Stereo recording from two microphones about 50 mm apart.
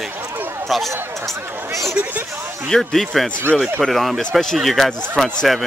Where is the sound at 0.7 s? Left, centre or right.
Centre.